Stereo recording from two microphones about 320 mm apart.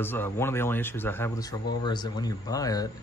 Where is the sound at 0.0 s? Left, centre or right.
Centre.